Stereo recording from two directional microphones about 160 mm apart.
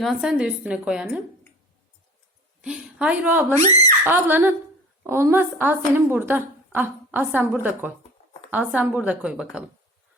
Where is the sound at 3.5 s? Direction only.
20° left (ahead or behind).